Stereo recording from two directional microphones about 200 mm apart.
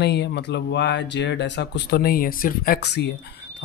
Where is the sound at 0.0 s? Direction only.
55° left (ahead or behind).